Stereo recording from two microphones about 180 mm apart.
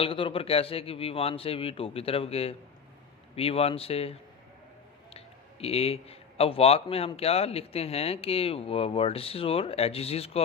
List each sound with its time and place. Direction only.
0.0 s speech: 30° left (ahead or behind)
5.1 s speech: 35° left (ahead or behind)